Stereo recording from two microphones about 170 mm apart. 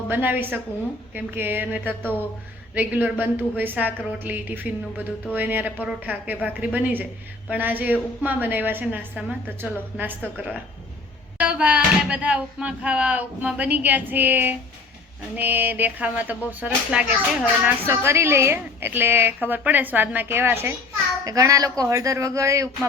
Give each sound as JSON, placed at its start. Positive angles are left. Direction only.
{"t": 0.1, "sound": "speech", "side_deg": -10}